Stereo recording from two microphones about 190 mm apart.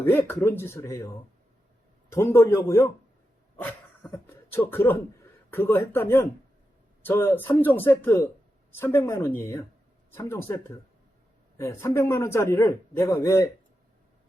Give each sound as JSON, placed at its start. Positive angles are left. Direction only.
{"t": 0.1, "sound": "a man's voice", "side_deg": 10}